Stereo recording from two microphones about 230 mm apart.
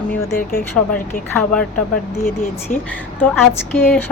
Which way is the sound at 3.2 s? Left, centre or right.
Centre.